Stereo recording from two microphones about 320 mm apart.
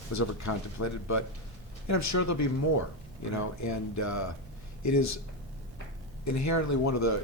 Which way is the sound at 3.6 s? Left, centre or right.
Left.